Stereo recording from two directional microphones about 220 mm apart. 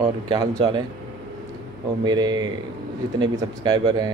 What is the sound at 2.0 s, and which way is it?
Speech, 20° right (ahead or behind).